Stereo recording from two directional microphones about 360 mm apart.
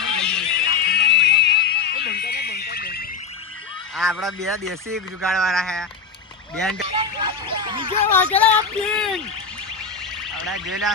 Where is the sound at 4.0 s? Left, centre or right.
Centre.